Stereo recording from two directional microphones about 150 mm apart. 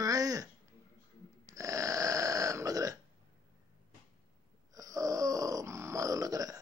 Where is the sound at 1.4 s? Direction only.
20° right (ahead or behind).